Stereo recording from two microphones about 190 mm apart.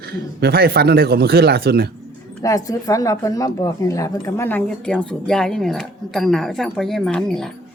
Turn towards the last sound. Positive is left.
turn(degrees=5)  # may be behind; listen again after turning